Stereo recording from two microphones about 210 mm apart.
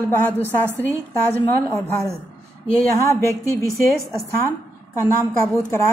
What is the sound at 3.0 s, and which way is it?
Speech, 15° left (ahead or behind).